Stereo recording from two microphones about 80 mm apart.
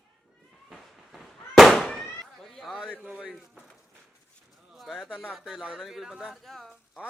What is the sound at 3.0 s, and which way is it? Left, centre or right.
Speech, centre.